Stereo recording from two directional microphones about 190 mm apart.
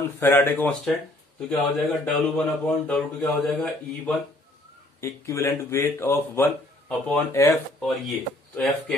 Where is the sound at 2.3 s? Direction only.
5° left (ahead or behind).